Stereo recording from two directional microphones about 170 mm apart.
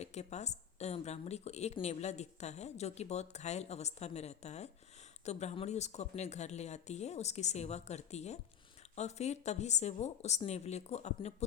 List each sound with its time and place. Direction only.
0.0 s a woman's voice: 40° left (ahead or behind)